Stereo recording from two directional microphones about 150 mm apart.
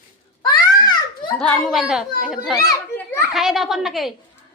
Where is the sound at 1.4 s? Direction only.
Centre (ahead or behind).